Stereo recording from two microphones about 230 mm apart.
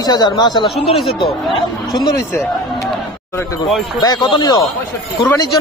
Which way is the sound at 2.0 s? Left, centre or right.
Centre.